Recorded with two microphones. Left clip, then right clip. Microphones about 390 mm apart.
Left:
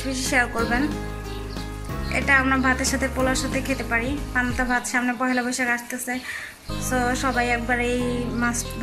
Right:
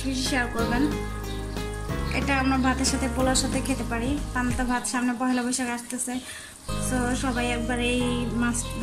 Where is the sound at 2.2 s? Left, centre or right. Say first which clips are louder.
Left 6 dB; centre.